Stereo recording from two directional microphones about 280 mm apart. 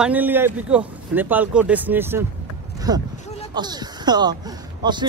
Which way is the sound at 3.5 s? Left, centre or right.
Centre.